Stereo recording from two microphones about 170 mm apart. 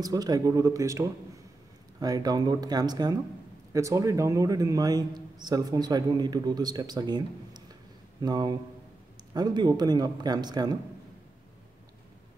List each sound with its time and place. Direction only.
0.0 s a man's voice: 20° right (ahead or behind)